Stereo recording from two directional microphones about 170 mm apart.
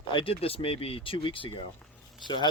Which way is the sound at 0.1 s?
30° left (ahead or behind).